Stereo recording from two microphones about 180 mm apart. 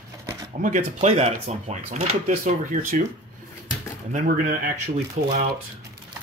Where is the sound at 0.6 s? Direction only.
40° right (ahead or behind).